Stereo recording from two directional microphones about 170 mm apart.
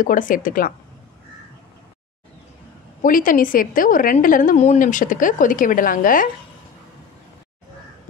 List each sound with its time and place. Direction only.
0.0 s a woman's voice: 50° left (ahead or behind)
3.0 s a woman's voice: 55° left (ahead or behind)